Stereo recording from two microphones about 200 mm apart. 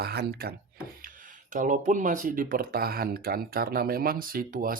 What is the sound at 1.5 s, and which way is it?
Speech, 40° right (ahead or behind).